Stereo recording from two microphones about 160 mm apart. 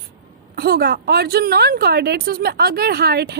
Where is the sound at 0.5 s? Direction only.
80° right.